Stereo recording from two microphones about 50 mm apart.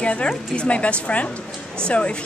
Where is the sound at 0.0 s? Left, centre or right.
Left.